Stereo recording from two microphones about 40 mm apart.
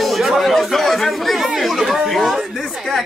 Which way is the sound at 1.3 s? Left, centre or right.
Centre.